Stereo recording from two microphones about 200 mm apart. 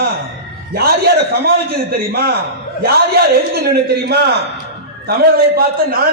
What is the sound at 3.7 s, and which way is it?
Speech, 55° right (ahead or behind).